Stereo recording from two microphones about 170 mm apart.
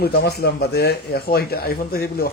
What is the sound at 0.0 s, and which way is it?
Speech, 70° left (ahead or behind).